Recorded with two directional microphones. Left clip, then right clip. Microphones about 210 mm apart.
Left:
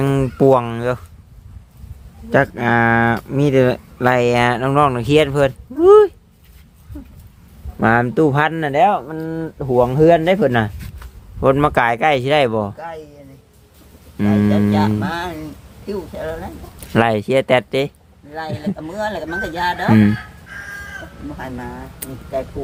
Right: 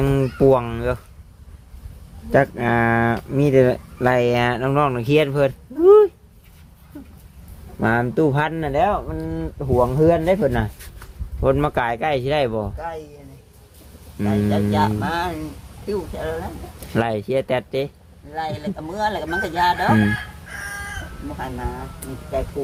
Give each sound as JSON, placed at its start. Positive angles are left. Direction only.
{"t": 0.0, "sound": "speech", "side_deg": 20}
{"t": 2.3, "sound": "speech", "side_deg": 15}
{"t": 7.8, "sound": "speech", "side_deg": 25}
{"t": 12.7, "sound": "speech", "side_deg": 20}
{"t": 14.2, "sound": "speech", "side_deg": 30}
{"t": 21.3, "sound": "speech", "side_deg": 30}